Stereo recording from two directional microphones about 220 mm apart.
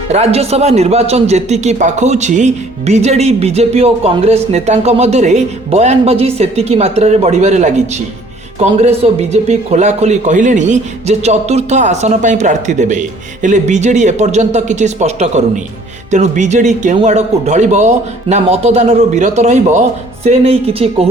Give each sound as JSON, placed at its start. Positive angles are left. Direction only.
{"t": 0.1, "sound": "a man's voice", "side_deg": -30}
{"t": 9.3, "sound": "a man's voice", "side_deg": -30}